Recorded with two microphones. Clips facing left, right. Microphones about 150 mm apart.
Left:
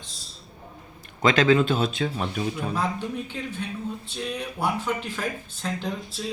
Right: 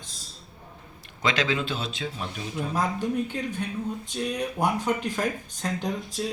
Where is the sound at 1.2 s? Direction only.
50° left (ahead or behind).